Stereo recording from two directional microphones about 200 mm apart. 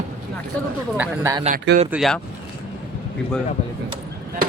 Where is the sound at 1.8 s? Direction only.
Centre (ahead or behind).